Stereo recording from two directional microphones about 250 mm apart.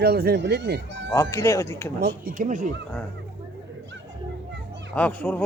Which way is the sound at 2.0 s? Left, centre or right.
Right.